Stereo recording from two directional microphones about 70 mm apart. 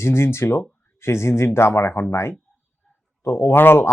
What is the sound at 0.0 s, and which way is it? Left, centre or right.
Speech, left.